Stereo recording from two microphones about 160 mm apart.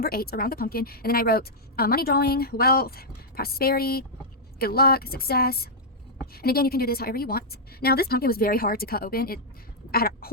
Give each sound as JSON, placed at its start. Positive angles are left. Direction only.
{"t": 0.0, "sound": "a woman's voice", "side_deg": 70}
{"t": 9.9, "sound": "duck", "side_deg": 70}